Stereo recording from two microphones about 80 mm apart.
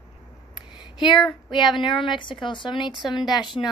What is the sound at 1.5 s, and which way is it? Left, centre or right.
A woman's voice, left.